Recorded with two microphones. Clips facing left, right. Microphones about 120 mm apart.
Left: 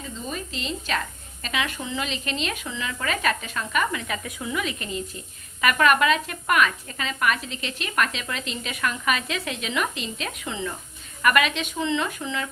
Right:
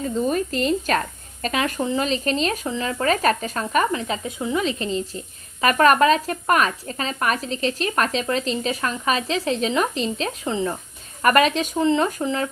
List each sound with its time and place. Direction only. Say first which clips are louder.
0.0 s speech: right 11 dB; 50° right (ahead or behind)